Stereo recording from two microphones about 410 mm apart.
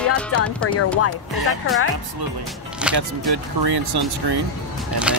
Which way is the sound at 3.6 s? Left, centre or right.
Right.